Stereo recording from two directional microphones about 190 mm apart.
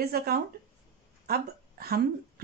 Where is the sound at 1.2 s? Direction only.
55° right (ahead or behind).